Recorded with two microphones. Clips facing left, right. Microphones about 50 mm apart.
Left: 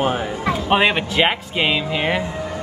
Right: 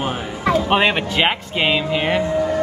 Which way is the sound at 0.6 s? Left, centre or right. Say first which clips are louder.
Even; centre.